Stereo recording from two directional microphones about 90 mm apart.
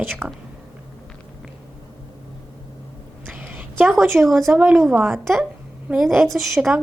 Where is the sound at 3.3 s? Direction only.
20° right (ahead or behind).